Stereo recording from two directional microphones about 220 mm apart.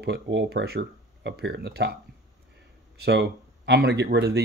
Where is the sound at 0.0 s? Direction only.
50° right (ahead or behind).